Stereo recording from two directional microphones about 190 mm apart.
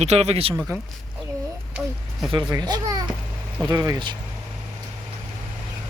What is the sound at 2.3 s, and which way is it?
Speech, 20° right (ahead or behind).